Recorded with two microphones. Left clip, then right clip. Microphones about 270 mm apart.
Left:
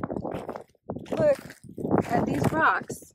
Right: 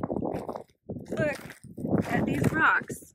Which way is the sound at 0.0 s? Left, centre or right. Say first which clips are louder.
Right 1 dB; right.